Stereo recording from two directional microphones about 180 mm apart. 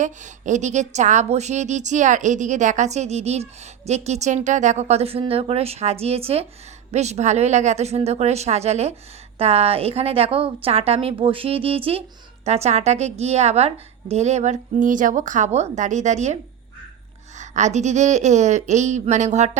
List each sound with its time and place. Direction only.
0.0 s a woman's voice: 40° right (ahead or behind)